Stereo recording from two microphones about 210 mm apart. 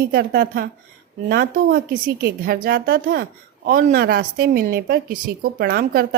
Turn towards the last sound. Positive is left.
turn(degrees=-45)  # may be behind; listen again after turning